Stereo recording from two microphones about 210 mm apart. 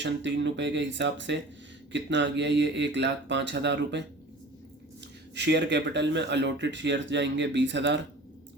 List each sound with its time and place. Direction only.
0.0 s speech: 60° right (ahead or behind)
5.3 s speech: 55° right (ahead or behind)